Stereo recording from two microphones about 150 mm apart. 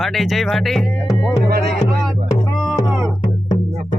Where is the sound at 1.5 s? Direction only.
90° right.